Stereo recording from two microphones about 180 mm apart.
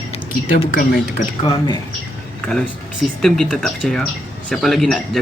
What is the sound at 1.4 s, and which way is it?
Speech, 25° left (ahead or behind).